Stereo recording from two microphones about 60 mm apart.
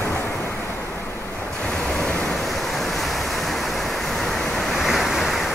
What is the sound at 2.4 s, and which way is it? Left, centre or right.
Waves, centre.